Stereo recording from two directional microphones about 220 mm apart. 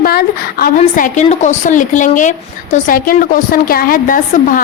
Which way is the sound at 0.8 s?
35° left (ahead or behind).